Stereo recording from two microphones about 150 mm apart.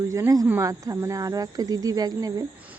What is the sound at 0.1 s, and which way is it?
Speech, 20° right (ahead or behind).